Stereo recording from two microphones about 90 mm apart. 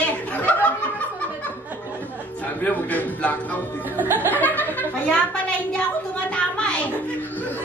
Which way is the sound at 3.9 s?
25° right (ahead or behind).